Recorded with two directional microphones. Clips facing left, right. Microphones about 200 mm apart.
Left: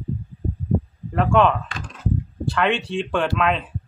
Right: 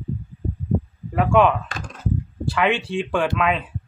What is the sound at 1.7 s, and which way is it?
Computer keyboard, 45° right (ahead or behind).